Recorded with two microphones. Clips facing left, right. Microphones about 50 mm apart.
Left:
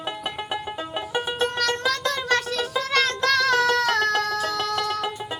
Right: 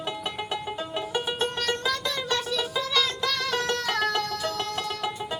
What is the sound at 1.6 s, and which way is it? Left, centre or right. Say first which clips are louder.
Music: left 4 dB; left.